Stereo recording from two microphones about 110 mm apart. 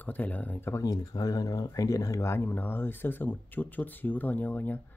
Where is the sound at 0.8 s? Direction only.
35° left (ahead or behind).